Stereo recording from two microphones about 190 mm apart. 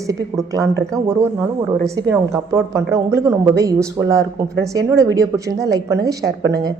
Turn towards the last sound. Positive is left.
turn(degrees=-20)  # may be behind; listen again after turning